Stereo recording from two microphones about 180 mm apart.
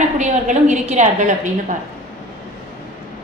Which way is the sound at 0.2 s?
40° right (ahead or behind).